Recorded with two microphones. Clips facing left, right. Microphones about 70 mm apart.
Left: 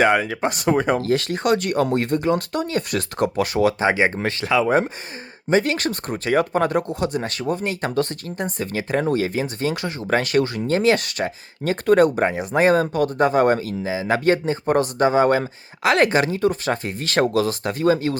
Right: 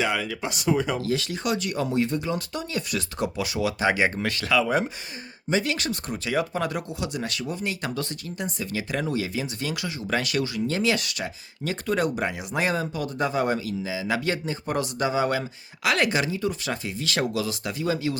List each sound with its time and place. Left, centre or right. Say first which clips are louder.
0.0 s speech: left 8 dB; left
3.8 s speech: left 4 dB; left